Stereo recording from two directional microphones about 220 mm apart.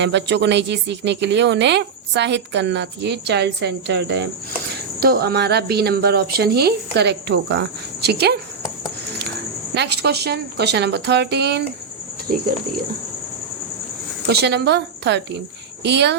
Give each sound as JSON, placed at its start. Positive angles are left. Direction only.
{"t": 0.0, "sound": "speech", "side_deg": -50}
{"t": 9.7, "sound": "speech", "side_deg": -50}
{"t": 14.3, "sound": "speech", "side_deg": -50}